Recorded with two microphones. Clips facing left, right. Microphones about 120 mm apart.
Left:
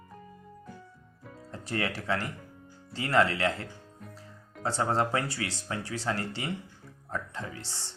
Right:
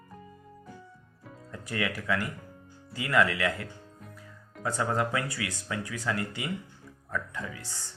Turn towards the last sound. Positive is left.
turn(degrees=30)  # may be behind; listen again after turning